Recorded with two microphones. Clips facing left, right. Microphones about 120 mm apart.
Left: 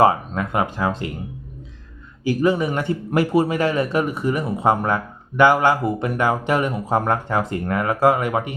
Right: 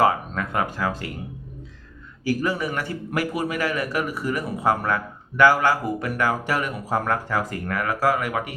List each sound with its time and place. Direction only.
0.0 s speech: 25° left (ahead or behind)
2.2 s speech: 20° left (ahead or behind)